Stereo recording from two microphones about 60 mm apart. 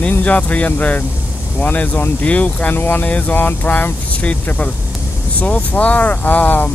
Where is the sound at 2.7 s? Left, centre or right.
Left.